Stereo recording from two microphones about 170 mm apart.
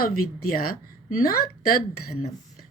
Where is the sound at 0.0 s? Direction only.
60° left (ahead or behind).